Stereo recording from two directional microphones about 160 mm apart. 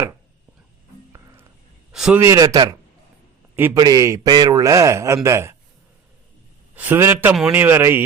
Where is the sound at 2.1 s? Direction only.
20° right (ahead or behind).